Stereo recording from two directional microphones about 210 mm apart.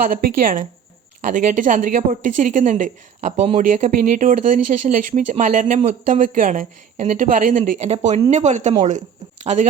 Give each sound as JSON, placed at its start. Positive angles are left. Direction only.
{"t": 0.0, "sound": "speech", "side_deg": -40}